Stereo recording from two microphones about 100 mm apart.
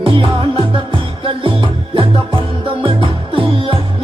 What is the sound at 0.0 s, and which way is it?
Music, 65° right (ahead or behind).